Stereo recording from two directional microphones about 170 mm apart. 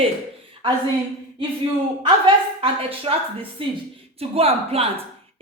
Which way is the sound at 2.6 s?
35° right (ahead or behind).